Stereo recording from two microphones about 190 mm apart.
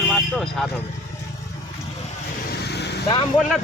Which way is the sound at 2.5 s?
60° left (ahead or behind).